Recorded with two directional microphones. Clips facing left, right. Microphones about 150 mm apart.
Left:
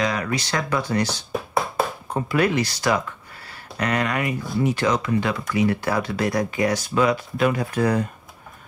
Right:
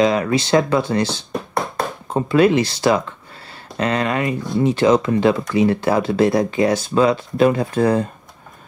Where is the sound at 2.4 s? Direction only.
25° right (ahead or behind).